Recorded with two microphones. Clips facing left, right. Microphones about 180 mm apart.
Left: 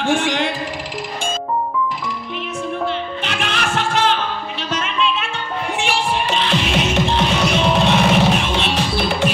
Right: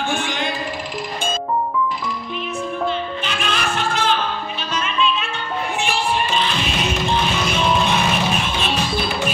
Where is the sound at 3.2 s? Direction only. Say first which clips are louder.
Left 1 dB; 75° left (ahead or behind).